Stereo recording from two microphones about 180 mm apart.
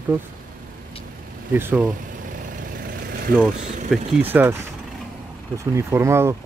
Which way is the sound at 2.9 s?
50° right (ahead or behind).